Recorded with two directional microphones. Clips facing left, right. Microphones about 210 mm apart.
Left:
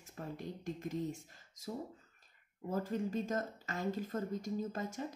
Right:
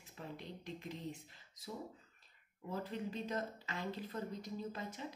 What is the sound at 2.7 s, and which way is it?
A woman's voice, 45° left (ahead or behind).